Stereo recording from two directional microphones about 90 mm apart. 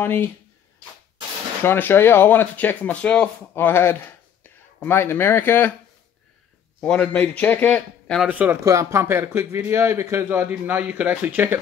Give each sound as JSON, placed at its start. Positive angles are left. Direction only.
{"t": 0.0, "sound": "speech", "side_deg": 25}
{"t": 1.6, "sound": "speech", "side_deg": 25}
{"t": 3.5, "sound": "speech", "side_deg": 25}
{"t": 6.8, "sound": "a man's voice", "side_deg": 10}
{"t": 8.3, "sound": "a man's voice", "side_deg": -20}
{"t": 8.6, "sound": "a man's voice", "side_deg": -35}
{"t": 10.5, "sound": "a man's voice", "side_deg": -15}